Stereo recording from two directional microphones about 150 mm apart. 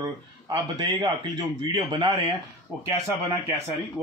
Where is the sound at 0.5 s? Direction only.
35° right (ahead or behind).